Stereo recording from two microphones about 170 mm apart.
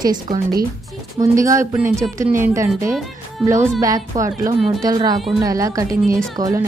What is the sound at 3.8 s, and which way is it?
A woman's voice, 20° right (ahead or behind).